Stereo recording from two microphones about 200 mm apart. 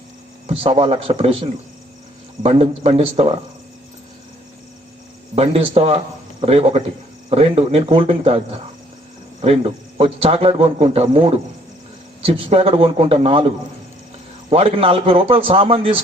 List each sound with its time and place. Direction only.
0.4 s speech: 25° right (ahead or behind)
5.3 s speech: 30° right (ahead or behind)
9.4 s speech: 30° right (ahead or behind)
14.5 s speech: 30° right (ahead or behind)